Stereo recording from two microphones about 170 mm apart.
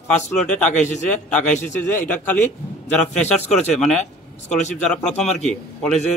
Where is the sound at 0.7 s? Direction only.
45° left (ahead or behind).